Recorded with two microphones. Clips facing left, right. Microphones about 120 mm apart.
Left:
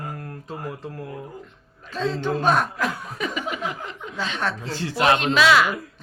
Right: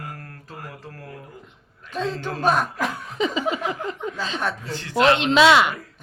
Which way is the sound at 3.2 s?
25° right (ahead or behind).